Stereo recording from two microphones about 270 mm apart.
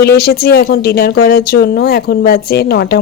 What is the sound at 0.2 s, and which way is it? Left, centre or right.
A woman's voice, left.